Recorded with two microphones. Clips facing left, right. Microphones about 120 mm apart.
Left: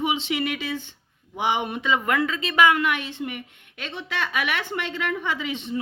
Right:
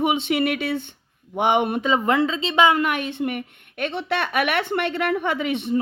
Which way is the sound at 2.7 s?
45° right (ahead or behind).